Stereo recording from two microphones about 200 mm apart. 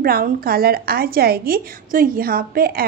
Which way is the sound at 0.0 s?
45° right (ahead or behind).